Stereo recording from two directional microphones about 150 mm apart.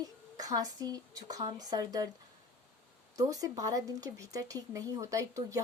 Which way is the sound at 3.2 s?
25° right (ahead or behind).